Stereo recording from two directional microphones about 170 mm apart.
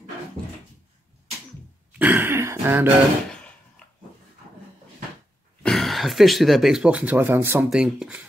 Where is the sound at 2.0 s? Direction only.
10° right (ahead or behind).